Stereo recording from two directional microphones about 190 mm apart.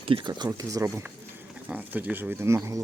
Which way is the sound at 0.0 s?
25° right (ahead or behind).